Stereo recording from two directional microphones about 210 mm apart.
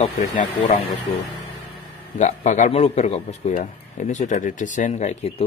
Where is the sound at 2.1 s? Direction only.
35° left (ahead or behind).